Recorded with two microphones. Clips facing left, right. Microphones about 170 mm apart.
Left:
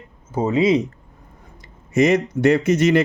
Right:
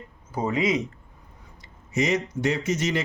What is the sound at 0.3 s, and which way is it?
Speech, 25° left (ahead or behind).